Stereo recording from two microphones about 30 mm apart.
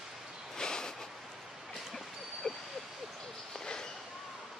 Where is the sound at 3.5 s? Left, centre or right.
Left.